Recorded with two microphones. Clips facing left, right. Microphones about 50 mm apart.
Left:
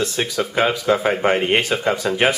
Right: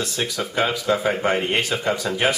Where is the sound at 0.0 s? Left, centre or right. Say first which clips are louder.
Left 4 dB; centre.